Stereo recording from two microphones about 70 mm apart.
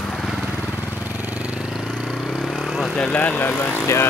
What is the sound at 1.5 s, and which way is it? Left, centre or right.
Vehicle, centre.